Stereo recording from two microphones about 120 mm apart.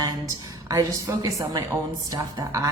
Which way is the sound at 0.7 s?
30° right (ahead or behind).